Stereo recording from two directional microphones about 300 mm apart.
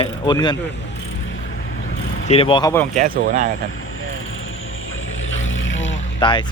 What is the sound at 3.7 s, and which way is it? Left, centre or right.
Vehicle, left.